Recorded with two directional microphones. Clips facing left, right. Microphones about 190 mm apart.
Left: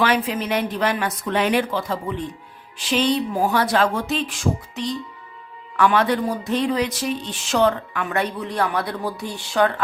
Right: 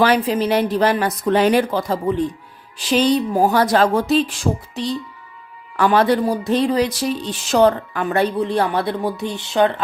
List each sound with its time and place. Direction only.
0.0 s a man's voice: 35° right (ahead or behind)